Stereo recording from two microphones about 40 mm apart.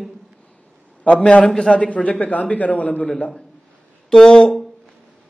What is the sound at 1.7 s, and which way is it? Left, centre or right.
A man's voice, left.